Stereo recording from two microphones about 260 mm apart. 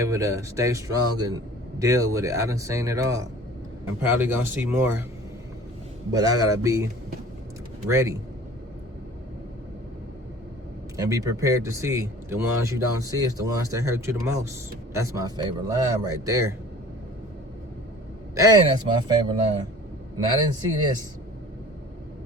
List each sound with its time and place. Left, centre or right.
0.0 s speech: centre
6.1 s speech: centre
7.9 s speech: centre
10.9 s speech: centre
18.3 s speech: centre